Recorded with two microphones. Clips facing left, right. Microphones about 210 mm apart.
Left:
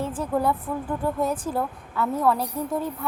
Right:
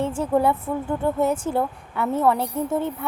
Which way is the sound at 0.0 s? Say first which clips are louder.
Right 4 dB; 25° right (ahead or behind).